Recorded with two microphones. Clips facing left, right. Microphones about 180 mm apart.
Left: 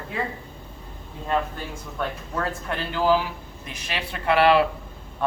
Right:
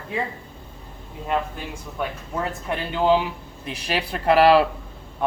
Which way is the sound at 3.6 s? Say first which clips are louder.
Right 6 dB; 35° right (ahead or behind).